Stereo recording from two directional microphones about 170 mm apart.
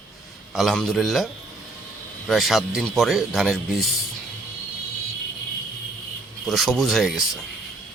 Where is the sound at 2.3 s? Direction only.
Centre (ahead or behind).